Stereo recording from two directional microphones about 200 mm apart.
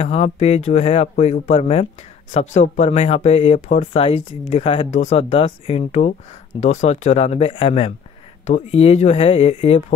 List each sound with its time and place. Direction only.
0.0 s speech: 30° left (ahead or behind)